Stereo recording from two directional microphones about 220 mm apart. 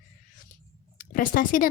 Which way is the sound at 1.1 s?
40° left (ahead or behind).